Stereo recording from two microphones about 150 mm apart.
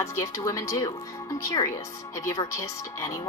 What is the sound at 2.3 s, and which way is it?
Speech, 25° left (ahead or behind).